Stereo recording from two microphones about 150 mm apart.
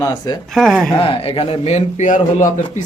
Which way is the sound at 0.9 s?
35° left (ahead or behind).